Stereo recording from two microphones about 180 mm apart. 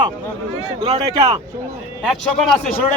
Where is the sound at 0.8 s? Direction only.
20° right (ahead or behind).